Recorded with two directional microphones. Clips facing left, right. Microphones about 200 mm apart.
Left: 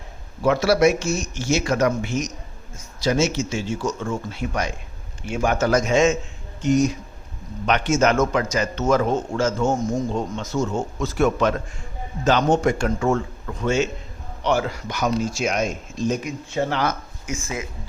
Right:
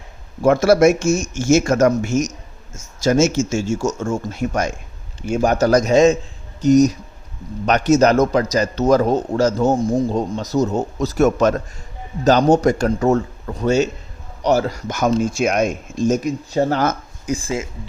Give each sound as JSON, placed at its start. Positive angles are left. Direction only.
{"t": 0.4, "sound": "a man's voice", "side_deg": -50}